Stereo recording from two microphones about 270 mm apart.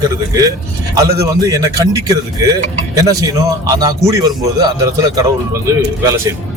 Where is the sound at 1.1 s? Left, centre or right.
Centre.